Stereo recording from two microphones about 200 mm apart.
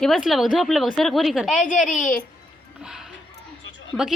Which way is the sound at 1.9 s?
40° left (ahead or behind).